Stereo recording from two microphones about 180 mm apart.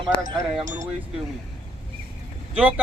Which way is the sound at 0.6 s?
45° right (ahead or behind).